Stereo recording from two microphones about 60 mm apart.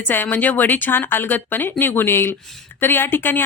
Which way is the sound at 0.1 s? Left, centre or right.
Left.